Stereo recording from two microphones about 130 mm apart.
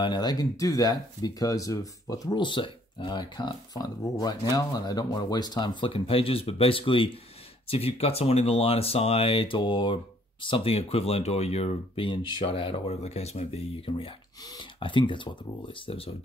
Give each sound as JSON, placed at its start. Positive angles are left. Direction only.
{"t": 0.0, "sound": "speech", "side_deg": 35}
{"t": 14.4, "sound": "speech", "side_deg": 30}